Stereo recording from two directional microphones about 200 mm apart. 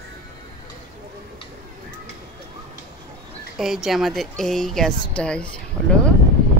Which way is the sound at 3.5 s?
Centre (ahead or behind).